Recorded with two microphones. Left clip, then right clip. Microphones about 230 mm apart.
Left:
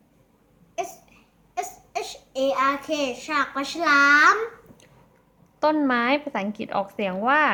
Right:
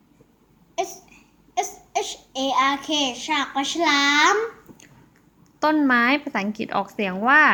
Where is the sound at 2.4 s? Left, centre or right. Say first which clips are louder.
Right 2 dB; left.